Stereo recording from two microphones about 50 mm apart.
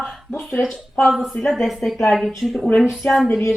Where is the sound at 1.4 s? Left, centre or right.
Centre.